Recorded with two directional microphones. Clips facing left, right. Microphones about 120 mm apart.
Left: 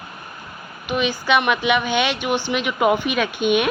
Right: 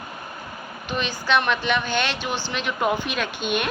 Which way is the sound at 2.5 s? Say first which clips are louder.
Left 4 dB; 10° left (ahead or behind).